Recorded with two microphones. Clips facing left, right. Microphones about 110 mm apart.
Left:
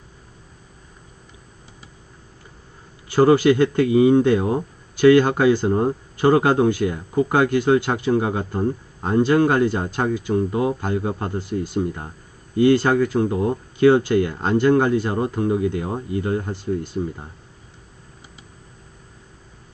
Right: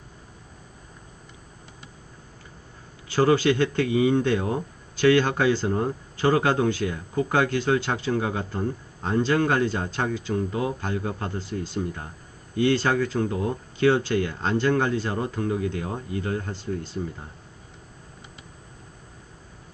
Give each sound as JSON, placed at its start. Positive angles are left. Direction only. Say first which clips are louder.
{"t": 3.2, "sound": "speech", "louder": "left 5 dB", "side_deg": 15}